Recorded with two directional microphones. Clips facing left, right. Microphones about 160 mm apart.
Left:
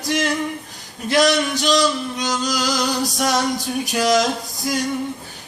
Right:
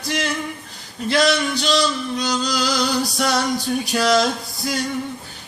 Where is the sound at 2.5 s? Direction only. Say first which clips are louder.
Right 1 dB; 40° left (ahead or behind).